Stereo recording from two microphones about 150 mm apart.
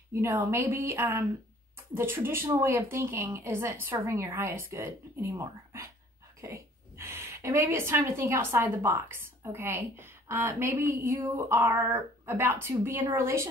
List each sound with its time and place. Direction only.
0.1 s a woman's voice: 20° right (ahead or behind)